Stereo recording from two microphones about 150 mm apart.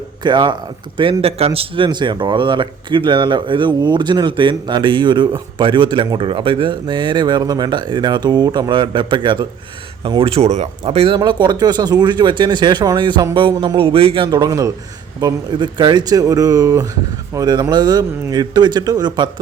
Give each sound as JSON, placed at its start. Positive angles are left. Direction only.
{"t": 0.2, "sound": "a man's voice", "side_deg": -30}
{"t": 14.3, "sound": "speech", "side_deg": -25}